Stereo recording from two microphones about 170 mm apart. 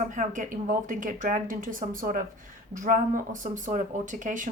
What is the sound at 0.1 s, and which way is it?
Speech, 50° right (ahead or behind).